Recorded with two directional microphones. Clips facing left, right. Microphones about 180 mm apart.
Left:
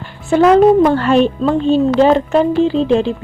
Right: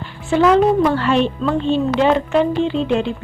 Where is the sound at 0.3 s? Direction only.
40° left (ahead or behind).